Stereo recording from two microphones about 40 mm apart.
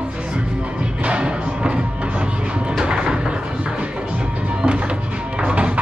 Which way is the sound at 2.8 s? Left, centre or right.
Right.